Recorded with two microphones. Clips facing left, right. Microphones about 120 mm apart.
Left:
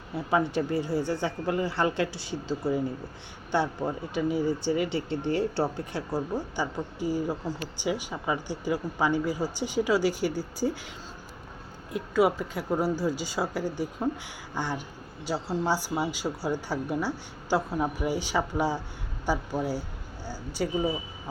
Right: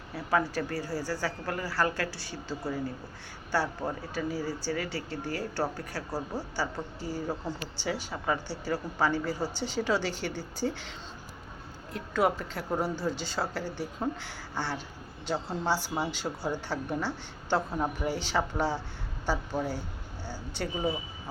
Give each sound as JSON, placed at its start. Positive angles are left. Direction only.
{"t": 0.1, "sound": "a woman's voice", "side_deg": 20}
{"t": 11.9, "sound": "a woman's voice", "side_deg": 10}